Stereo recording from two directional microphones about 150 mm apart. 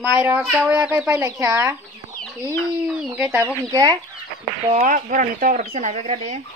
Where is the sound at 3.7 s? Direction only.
25° right (ahead or behind).